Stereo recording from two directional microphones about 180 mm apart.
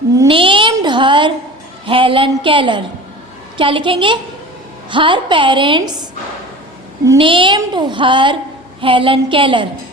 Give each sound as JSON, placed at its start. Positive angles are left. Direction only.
{"t": 0.3, "sound": "a sound", "side_deg": -30}
{"t": 1.9, "sound": "a woman's voice", "side_deg": -30}
{"t": 7.2, "sound": "a woman's voice", "side_deg": -30}